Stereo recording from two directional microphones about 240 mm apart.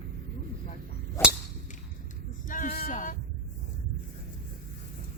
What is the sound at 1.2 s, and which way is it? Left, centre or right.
Cap gun, centre.